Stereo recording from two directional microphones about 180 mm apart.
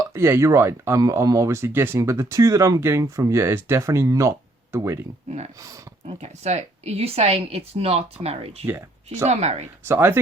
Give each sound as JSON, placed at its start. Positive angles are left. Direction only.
{"t": 0.0, "sound": "speech", "side_deg": -15}
{"t": 6.1, "sound": "speech", "side_deg": -40}
{"t": 9.8, "sound": "speech", "side_deg": -15}